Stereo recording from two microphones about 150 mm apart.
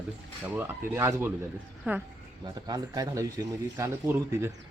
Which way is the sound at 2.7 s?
25° right (ahead or behind).